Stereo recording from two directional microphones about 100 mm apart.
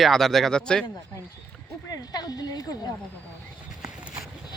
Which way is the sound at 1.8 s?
40° left (ahead or behind).